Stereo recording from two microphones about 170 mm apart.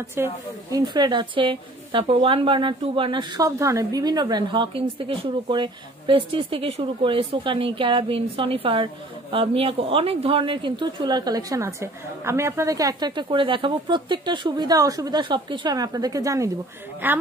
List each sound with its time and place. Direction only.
0.1 s a woman's voice: 15° right (ahead or behind)